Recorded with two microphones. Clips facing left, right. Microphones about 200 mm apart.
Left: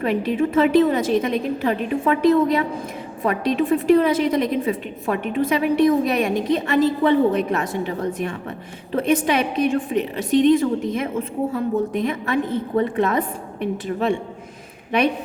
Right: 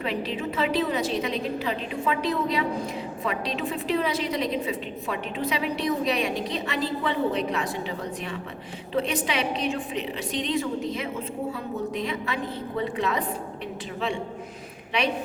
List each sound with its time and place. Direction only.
0.0 s a woman's voice: 50° left (ahead or behind)